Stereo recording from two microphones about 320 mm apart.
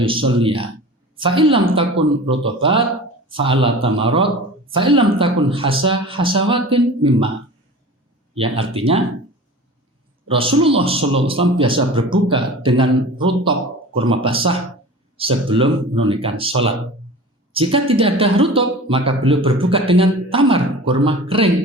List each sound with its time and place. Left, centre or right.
0.0 s a man's voice: centre
8.4 s a man's voice: centre
10.2 s a man's voice: centre